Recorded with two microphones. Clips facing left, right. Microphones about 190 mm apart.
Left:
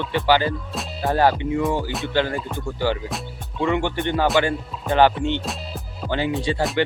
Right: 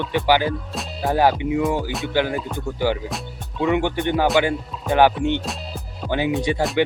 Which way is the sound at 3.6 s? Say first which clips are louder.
Right 2 dB; 15° right (ahead or behind).